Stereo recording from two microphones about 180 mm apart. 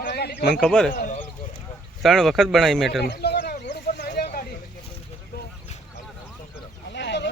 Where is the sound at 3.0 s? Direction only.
65° left (ahead or behind).